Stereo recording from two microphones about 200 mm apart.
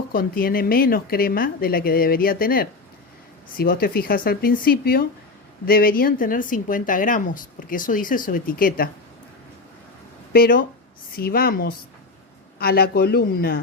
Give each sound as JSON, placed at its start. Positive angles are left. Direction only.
{"t": 0.1, "sound": "speech", "side_deg": 45}
{"t": 10.3, "sound": "speech", "side_deg": 50}